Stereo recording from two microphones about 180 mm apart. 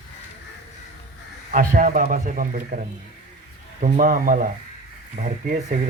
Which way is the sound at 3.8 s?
45° right (ahead or behind).